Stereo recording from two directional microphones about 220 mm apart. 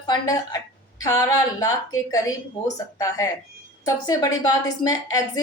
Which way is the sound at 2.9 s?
15° left (ahead or behind).